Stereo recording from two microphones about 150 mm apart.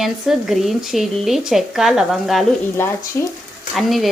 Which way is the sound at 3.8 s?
Centre (ahead or behind).